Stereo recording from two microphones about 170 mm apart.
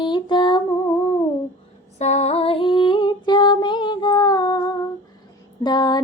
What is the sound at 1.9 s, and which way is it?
Female singing, 40° left (ahead or behind).